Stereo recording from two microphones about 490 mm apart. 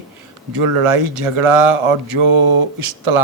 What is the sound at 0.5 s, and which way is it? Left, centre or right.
Speech, right.